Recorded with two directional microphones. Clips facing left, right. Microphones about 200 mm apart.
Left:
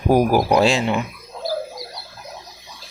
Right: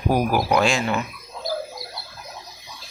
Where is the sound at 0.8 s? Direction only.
15° left (ahead or behind).